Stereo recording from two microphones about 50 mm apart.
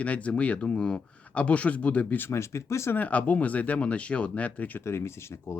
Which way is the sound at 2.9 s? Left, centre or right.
Left.